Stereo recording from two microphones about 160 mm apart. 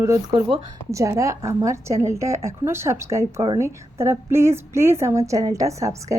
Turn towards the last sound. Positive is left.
turn(degrees=-20)  # may be behind; listen again after turning